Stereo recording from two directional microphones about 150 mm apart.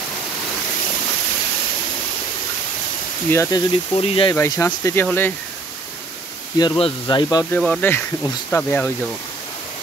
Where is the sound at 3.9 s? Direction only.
40° left (ahead or behind).